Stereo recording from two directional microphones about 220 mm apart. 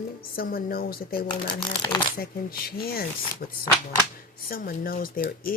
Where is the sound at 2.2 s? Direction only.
45° left (ahead or behind).